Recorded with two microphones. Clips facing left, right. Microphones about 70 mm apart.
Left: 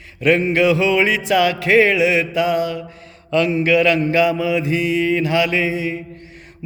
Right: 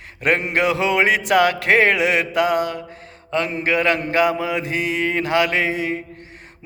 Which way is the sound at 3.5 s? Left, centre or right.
Right.